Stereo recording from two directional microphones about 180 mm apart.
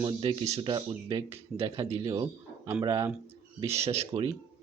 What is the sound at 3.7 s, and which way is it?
Speech, 35° right (ahead or behind).